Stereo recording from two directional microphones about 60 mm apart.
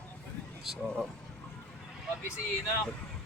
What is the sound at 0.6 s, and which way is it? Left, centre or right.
Speech, centre.